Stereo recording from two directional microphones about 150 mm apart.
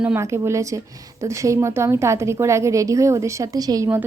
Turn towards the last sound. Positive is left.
turn(degrees=-20)  # may be behind; listen again after turning